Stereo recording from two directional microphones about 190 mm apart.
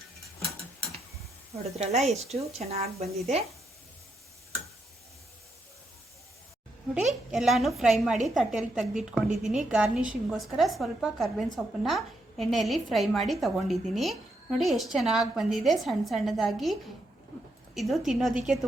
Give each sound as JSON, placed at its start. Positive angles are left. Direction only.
{"t": 1.5, "sound": "speech", "side_deg": -35}
{"t": 7.1, "sound": "a woman's voice", "side_deg": 0}
{"t": 17.7, "sound": "a woman's voice", "side_deg": 0}